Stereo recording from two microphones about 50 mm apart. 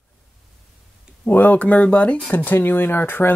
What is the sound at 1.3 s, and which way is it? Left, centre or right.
Speech, left.